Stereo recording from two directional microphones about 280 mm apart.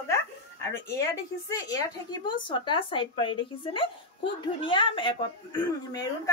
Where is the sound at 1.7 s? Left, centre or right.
Centre.